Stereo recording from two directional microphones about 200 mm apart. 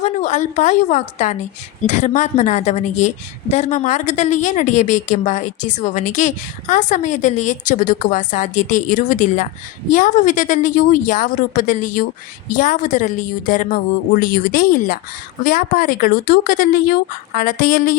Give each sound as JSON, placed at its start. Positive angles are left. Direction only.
{"t": 0.0, "sound": "a woman's voice", "side_deg": 35}